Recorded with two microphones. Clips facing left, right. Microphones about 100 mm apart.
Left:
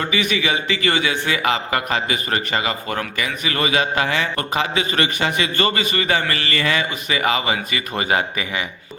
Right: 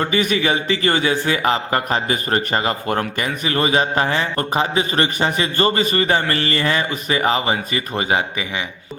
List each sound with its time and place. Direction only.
0.1 s a man's voice: 40° right (ahead or behind); by 8.6 s 20° right (ahead or behind)